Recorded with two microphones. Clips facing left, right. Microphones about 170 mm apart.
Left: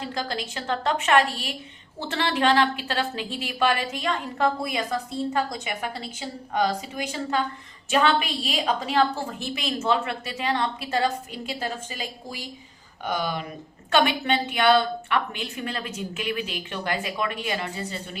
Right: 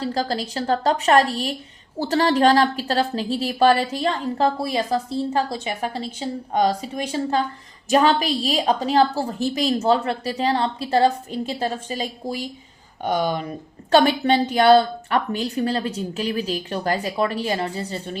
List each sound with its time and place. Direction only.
0.0 s a woman's voice: 35° right (ahead or behind)